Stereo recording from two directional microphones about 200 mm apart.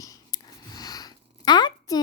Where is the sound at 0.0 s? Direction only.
15° left (ahead or behind).